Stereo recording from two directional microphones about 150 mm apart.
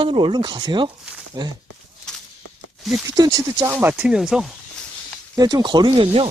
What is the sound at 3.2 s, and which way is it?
Speech, 25° right (ahead or behind).